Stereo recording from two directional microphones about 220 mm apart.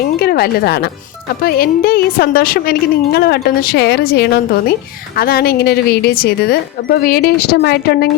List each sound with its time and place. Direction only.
0.2 s speech: 45° left (ahead or behind)